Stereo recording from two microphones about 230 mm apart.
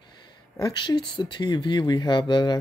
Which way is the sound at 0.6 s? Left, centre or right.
Centre.